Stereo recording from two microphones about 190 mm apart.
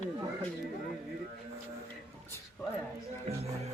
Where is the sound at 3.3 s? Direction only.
35° right (ahead or behind).